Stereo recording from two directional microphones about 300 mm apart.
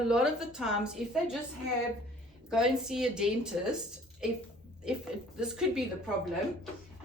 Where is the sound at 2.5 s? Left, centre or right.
Centre.